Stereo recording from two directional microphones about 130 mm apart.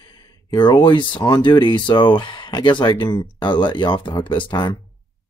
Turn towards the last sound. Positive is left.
turn(degrees=40)  # may be behind; listen again after turning